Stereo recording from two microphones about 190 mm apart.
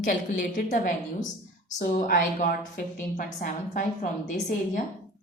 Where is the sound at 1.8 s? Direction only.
50° left (ahead or behind).